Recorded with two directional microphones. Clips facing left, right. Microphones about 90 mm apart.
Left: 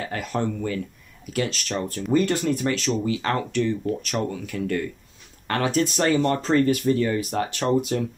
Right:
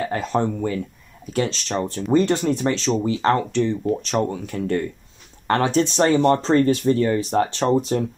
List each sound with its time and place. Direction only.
0.1 s speech: 25° right (ahead or behind)